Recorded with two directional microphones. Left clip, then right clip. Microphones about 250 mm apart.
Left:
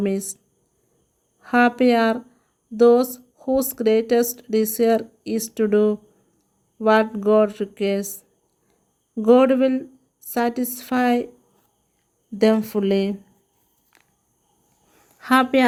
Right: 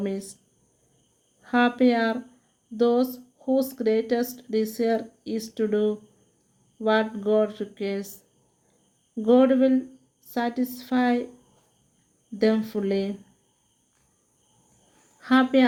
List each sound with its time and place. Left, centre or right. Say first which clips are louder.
0.0 s speech: left 6 dB; left
1.4 s speech: left 4 dB; left
12.4 s speech: left 5 dB; left
15.2 s a woman's voice: left 4 dB; left